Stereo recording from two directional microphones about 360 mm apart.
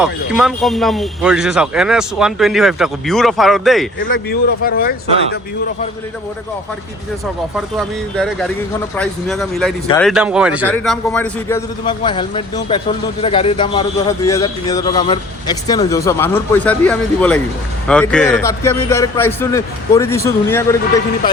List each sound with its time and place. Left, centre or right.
0.0 s speech: centre
4.1 s speech: left
9.0 s a man's voice: centre